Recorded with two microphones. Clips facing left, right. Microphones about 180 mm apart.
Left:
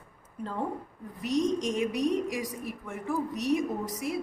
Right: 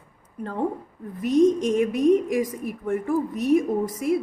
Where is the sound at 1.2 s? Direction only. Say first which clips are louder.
Right 9 dB; 55° right (ahead or behind).